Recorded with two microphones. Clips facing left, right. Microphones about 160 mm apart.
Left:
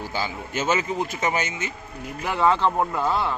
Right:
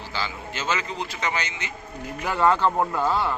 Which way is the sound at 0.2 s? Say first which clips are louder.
Left 3 dB; 20° left (ahead or behind).